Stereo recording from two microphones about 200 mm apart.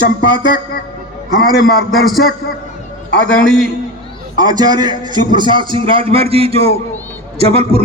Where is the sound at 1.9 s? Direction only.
Centre (ahead or behind).